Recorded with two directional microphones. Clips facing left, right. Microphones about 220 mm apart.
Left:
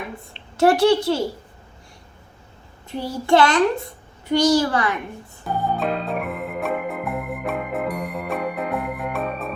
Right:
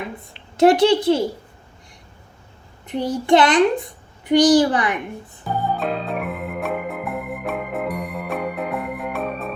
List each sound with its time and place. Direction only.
0.5 s a child's voice: 20° right (ahead or behind)
2.8 s a child's voice: 20° right (ahead or behind)
5.5 s organ: centre (ahead or behind)